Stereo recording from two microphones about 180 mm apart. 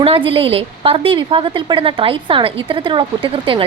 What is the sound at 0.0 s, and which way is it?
A woman's voice, 30° right (ahead or behind).